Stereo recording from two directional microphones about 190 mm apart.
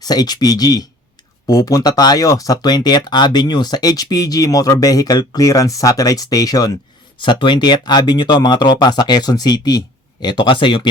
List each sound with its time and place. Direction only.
0.0 s speech: 20° left (ahead or behind)